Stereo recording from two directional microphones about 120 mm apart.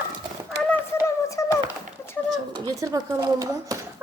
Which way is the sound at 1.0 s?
25° left (ahead or behind).